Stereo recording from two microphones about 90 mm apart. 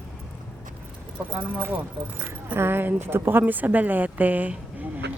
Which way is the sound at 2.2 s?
25° right (ahead or behind).